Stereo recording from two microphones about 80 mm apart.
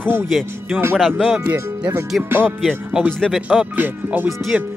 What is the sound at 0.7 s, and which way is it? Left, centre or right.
Speech, right.